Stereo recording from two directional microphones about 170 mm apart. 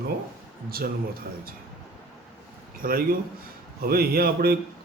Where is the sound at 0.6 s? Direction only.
60° right (ahead or behind).